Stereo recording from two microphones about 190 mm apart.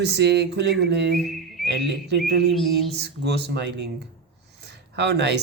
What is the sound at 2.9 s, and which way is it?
Speech, 60° right (ahead or behind).